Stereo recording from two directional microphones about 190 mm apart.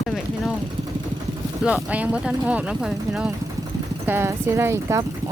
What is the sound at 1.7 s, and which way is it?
Speech, 5° right (ahead or behind).